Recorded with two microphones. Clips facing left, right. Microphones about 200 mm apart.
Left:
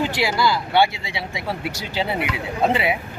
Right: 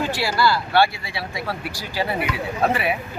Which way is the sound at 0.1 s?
15° left (ahead or behind).